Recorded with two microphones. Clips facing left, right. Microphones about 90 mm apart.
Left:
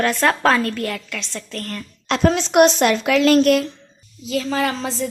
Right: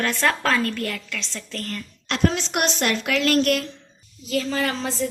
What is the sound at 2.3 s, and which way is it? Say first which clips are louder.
Speech: left 11 dB; 60° left (ahead or behind).